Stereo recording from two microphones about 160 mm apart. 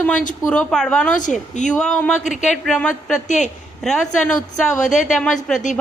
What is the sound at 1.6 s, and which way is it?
Speech, 50° left (ahead or behind).